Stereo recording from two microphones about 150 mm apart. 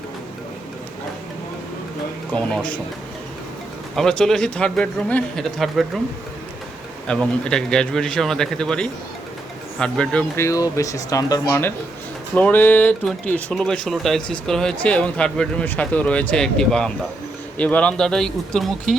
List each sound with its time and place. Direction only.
2.3 s speech: 10° left (ahead or behind)
3.9 s a man's voice: 5° left (ahead or behind)
7.1 s a man's voice: 5° left (ahead or behind)
10.4 s a man's voice: 25° left (ahead or behind); by 18.9 s centre (ahead or behind)